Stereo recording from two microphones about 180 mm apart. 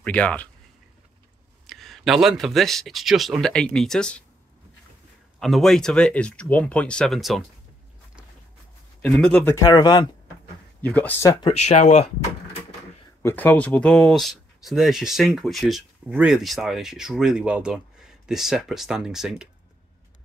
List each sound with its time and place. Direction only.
0.0 s speech: 5° left (ahead or behind)
1.7 s speech: centre (ahead or behind)
5.4 s speech: centre (ahead or behind)
9.1 s speech: 5° left (ahead or behind)
9.6 s speech: 25° left (ahead or behind)
10.8 s speech: 10° left (ahead or behind)
11.4 s speech: 40° left (ahead or behind)
13.2 s speech: 10° left (ahead or behind)